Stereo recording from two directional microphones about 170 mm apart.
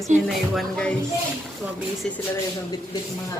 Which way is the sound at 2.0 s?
5° left (ahead or behind).